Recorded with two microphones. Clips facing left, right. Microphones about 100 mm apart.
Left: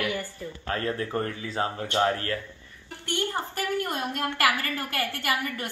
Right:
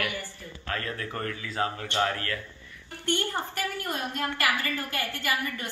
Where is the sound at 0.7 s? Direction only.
30° left (ahead or behind).